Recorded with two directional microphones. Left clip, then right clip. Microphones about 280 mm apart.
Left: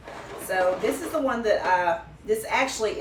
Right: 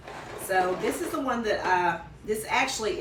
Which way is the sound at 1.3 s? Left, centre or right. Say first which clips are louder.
Left 2 dB; centre.